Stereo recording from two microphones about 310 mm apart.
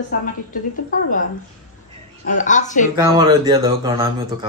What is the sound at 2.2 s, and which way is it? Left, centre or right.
Speech, left.